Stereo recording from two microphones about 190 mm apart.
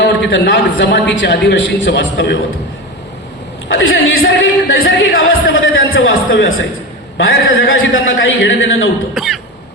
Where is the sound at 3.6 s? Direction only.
90° left.